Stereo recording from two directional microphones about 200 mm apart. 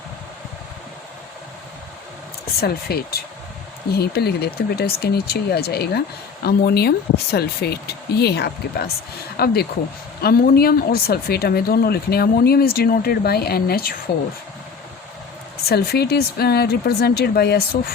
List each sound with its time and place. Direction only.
2.6 s speech: 50° left (ahead or behind)
15.6 s speech: 55° left (ahead or behind)